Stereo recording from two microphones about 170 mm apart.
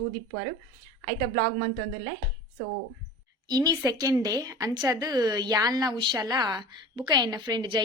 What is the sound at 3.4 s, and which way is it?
A woman's voice, 20° right (ahead or behind).